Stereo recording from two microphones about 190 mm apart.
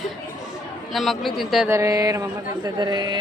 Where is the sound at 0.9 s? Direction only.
Centre (ahead or behind).